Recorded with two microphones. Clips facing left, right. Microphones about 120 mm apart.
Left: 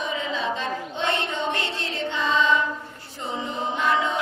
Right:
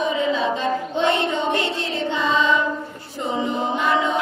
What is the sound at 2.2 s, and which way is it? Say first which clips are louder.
Music: right 2 dB; 10° right (ahead or behind).